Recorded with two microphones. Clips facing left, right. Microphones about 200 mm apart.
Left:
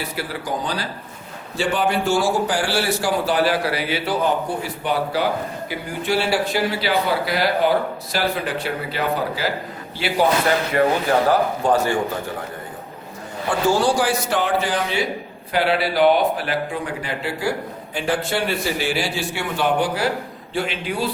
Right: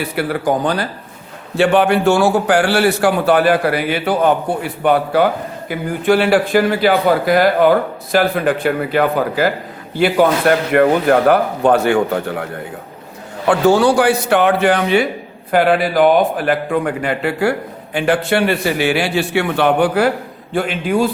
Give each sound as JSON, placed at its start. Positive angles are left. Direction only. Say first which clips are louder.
{"t": 0.2, "sound": "a man's voice", "louder": "right 11 dB", "side_deg": -60}
{"t": 13.5, "sound": "a man's voice", "louder": "right 7 dB", "side_deg": -65}
{"t": 15.5, "sound": "a man's voice", "louder": "right 6 dB", "side_deg": -50}